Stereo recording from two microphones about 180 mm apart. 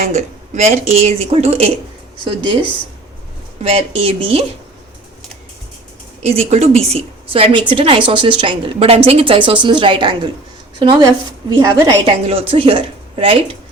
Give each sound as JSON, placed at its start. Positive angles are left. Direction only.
{"t": 0.0, "sound": "a woman's voice", "side_deg": -40}
{"t": 6.2, "sound": "a woman's voice", "side_deg": -35}